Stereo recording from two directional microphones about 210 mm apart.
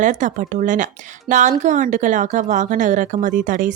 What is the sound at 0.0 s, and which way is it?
Speech, 35° right (ahead or behind).